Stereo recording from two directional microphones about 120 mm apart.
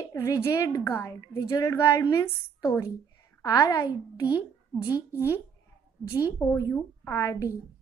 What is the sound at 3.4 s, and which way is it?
Speech, 35° left (ahead or behind).